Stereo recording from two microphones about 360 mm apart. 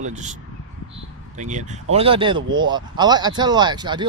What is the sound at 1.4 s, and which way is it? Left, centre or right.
Speech, centre.